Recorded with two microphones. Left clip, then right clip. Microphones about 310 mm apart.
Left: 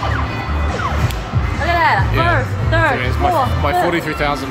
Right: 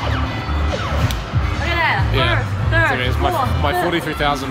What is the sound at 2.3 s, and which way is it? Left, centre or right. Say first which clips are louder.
Music: left 4 dB; centre.